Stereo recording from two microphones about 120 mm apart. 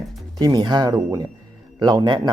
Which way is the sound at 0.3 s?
35° right (ahead or behind).